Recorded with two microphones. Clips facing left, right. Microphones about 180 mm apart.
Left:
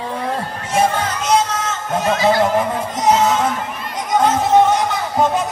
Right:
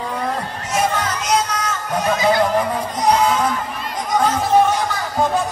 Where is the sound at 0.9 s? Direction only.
30° left (ahead or behind).